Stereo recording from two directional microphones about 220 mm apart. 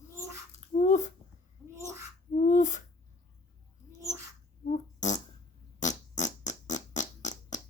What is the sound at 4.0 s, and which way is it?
Bird, 15° right (ahead or behind).